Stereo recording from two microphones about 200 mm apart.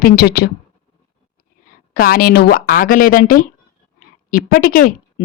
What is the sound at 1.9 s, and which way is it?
A woman's voice, 45° left (ahead or behind).